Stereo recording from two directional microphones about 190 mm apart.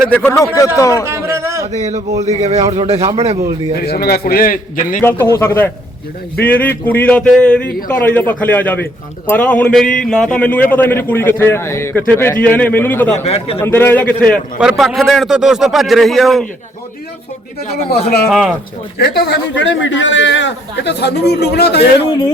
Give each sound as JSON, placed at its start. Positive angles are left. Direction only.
{"t": 0.1, "sound": "a man's voice", "side_deg": 10}
{"t": 1.0, "sound": "music", "side_deg": -15}
{"t": 2.2, "sound": "speech", "side_deg": -35}
{"t": 3.8, "sound": "a man's voice", "side_deg": 55}
{"t": 4.9, "sound": "a man's voice", "side_deg": 10}
{"t": 13.2, "sound": "a man's voice", "side_deg": 30}
{"t": 13.6, "sound": "a man's voice", "side_deg": 10}
{"t": 17.7, "sound": "a man's voice", "side_deg": 35}
{"t": 18.3, "sound": "a man's voice", "side_deg": 0}
{"t": 18.9, "sound": "a man's voice", "side_deg": 60}